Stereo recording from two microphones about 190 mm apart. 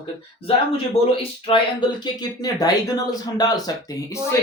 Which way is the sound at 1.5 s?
30° left (ahead or behind).